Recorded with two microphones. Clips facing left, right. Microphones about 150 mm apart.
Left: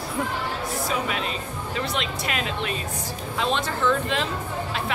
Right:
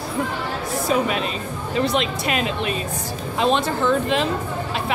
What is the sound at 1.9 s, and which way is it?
Speech, 20° right (ahead or behind).